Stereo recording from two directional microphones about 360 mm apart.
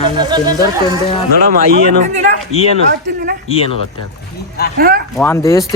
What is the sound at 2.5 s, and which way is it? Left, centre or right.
Speech, centre.